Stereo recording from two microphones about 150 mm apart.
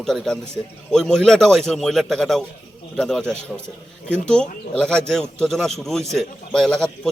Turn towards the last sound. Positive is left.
turn(degrees=0)  # may be behind; listen again after turning